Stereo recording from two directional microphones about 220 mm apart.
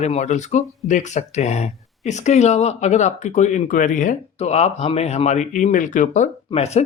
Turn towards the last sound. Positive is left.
turn(degrees=30)  # may be behind; listen again after turning